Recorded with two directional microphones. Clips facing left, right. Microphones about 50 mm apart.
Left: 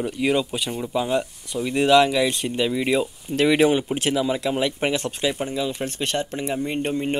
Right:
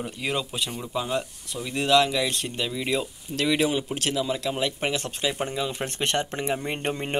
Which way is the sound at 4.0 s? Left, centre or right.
Centre.